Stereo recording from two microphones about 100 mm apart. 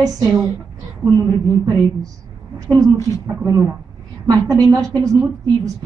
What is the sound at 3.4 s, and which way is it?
A woman's voice, 35° right (ahead or behind).